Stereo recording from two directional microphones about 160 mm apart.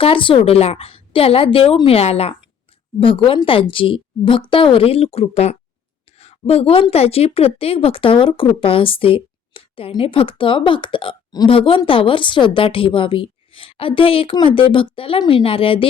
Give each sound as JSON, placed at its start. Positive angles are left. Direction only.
{"t": 0.0, "sound": "a woman's voice", "side_deg": 35}